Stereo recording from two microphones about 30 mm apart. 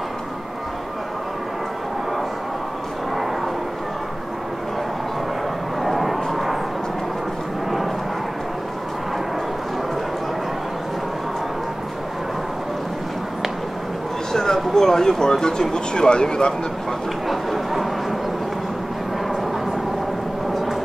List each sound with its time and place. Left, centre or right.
5.8 s vehicle: centre
14.3 s speech: centre
17.3 s a sound: centre